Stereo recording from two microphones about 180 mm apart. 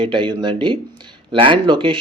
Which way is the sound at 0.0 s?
30° right (ahead or behind).